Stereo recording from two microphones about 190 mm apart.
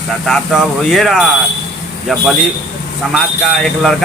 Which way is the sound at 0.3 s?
Centre (ahead or behind).